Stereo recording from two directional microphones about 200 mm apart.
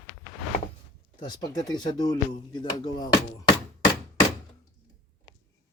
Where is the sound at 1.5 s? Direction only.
20° left (ahead or behind).